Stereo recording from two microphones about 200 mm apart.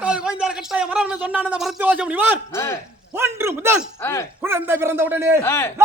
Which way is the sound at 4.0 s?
10° left (ahead or behind).